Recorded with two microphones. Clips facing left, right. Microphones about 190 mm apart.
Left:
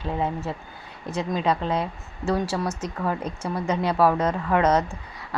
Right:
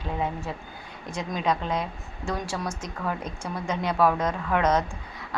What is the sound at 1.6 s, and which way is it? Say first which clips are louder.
Speech: left 3 dB; 30° left (ahead or behind).